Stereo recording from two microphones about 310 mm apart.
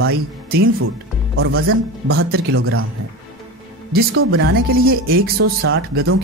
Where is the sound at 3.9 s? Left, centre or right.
Right.